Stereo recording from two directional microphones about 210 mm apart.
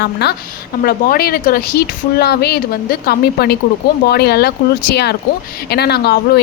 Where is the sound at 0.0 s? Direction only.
50° left (ahead or behind).